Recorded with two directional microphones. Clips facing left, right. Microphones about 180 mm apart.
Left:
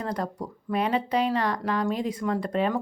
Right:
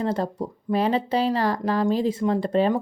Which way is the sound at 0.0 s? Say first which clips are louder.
Right 5 dB; 25° right (ahead or behind).